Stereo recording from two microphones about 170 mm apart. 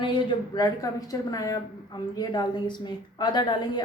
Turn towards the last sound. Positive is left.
turn(degrees=25)  # may be behind; listen again after turning